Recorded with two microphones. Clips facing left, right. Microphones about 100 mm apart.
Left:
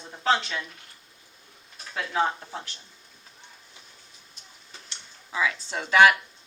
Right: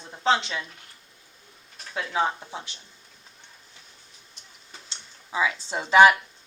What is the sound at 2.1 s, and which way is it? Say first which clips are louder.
Speech: even; 15° right (ahead or behind).